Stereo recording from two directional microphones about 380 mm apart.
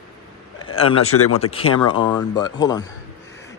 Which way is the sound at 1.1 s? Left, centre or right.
Left.